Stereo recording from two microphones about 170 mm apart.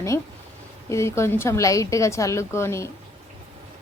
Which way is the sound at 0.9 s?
15° left (ahead or behind).